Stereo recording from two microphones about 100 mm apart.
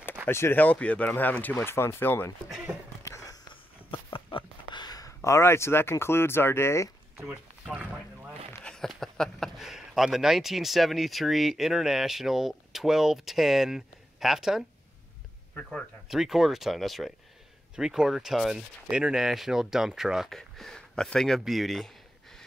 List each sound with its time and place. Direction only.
0.3 s speech: 25° left (ahead or behind)
3.0 s a sound: 30° left (ahead or behind)
3.4 s a sound: 60° left (ahead or behind); by 6.9 s 25° left (ahead or behind)
7.2 s boat: 10° right (ahead or behind)
8.6 s speech: 5° left (ahead or behind)
16.1 s speech: 5° right (ahead or behind)